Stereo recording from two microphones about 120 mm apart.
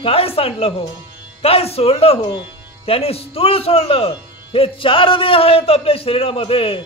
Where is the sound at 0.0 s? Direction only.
55° left (ahead or behind).